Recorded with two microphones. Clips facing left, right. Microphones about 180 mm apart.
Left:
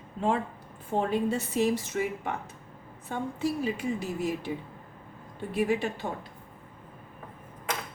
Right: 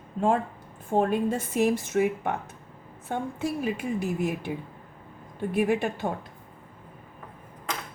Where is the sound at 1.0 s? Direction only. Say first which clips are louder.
Right 2 dB; 50° right (ahead or behind).